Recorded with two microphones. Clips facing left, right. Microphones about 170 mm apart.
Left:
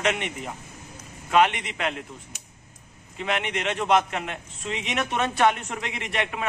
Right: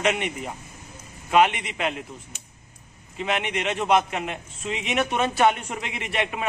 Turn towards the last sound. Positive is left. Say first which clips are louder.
# right 1 dB
turn(degrees=-5)  # may be behind; listen again after turning